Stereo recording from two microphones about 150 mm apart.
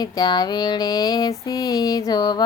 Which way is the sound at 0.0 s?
25° left (ahead or behind).